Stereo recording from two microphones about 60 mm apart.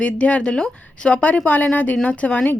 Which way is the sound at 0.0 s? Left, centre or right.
Left.